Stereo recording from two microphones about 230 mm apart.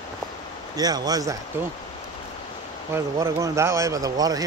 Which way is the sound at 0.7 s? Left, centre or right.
Centre.